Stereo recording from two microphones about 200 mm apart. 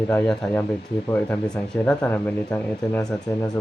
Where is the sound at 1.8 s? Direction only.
10° left (ahead or behind).